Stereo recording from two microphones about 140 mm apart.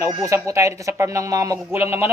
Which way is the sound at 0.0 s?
20° right (ahead or behind).